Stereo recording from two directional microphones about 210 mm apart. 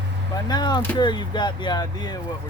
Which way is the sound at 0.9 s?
20° left (ahead or behind).